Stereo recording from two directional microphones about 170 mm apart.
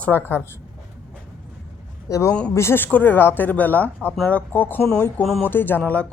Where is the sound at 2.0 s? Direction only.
20° left (ahead or behind).